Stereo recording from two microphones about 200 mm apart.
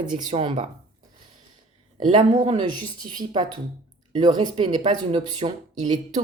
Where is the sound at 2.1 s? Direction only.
30° right (ahead or behind).